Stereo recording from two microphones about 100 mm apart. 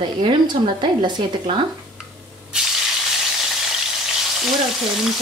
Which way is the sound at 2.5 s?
10° right (ahead or behind).